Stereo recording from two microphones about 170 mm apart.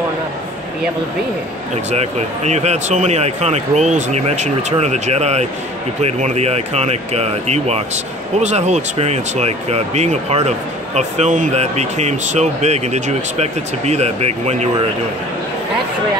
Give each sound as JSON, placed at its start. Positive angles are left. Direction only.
{"t": 1.9, "sound": "speech", "side_deg": -40}